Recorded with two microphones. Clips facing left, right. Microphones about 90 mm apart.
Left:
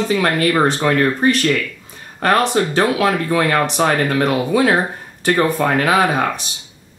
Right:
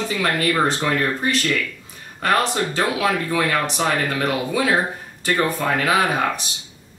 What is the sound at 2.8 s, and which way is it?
Speech, 40° left (ahead or behind).